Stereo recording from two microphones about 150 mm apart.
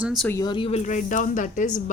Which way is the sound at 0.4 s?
35° left (ahead or behind).